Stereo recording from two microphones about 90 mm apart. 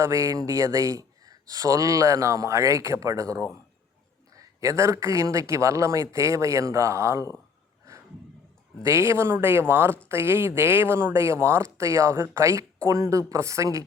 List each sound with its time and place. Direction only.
0.0 s speech: 35° right (ahead or behind)
8.8 s speech: 30° right (ahead or behind)